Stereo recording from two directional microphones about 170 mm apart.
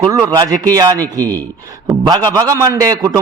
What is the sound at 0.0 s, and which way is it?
A man's voice, 20° right (ahead or behind).